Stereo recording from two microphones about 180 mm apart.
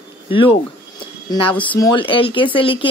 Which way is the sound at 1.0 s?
30° left (ahead or behind).